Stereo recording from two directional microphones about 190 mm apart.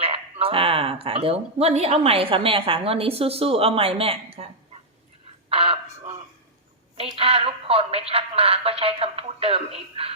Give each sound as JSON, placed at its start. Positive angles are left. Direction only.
{"t": 0.0, "sound": "speech", "side_deg": -30}
{"t": 5.5, "sound": "a sound", "side_deg": -30}
{"t": 6.9, "sound": "a woman's voice", "side_deg": -30}